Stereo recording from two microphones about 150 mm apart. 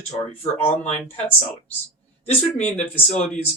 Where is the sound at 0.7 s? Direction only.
50° left (ahead or behind).